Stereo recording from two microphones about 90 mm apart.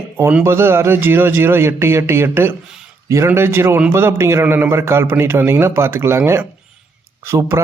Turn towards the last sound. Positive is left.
turn(degrees=-30)  # may be behind; listen again after turning